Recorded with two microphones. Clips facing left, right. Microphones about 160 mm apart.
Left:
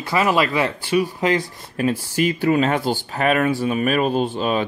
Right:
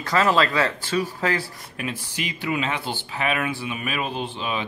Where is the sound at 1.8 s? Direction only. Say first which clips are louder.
Left 11 dB; 35° left (ahead or behind).